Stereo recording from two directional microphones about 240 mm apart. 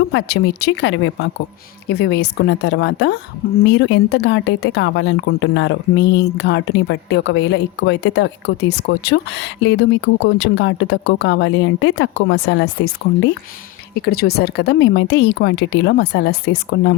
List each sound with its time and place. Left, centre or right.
0.1 s a woman's voice: left
14.0 s a woman's voice: left